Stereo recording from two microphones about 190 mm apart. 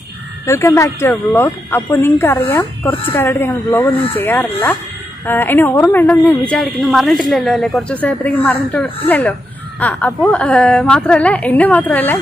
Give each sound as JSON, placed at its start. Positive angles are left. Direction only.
{"t": 0.5, "sound": "speech", "side_deg": 15}